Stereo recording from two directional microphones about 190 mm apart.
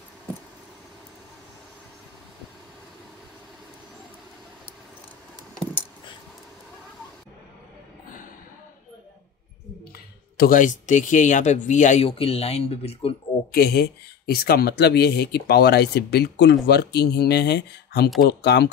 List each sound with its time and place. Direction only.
10.3 s speech: 50° left (ahead or behind); by 13.1 s 30° left (ahead or behind)
13.5 s speech: 55° left (ahead or behind)